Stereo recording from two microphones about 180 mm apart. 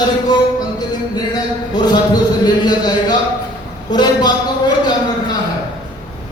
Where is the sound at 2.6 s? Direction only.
25° left (ahead or behind).